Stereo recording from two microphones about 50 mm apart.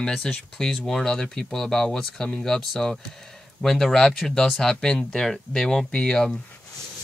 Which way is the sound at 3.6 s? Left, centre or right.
Centre.